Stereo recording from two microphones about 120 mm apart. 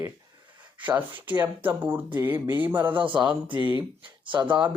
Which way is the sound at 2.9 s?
40° right (ahead or behind).